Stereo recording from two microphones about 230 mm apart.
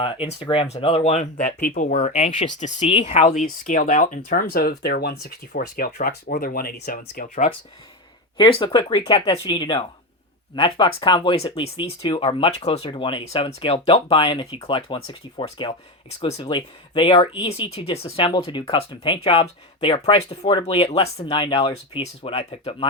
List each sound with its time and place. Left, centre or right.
0.0 s speech: left
8.4 s speech: left